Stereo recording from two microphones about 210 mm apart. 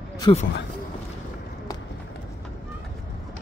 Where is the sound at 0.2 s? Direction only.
30° left (ahead or behind).